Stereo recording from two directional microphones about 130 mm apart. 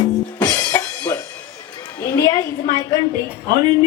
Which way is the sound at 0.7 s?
15° left (ahead or behind).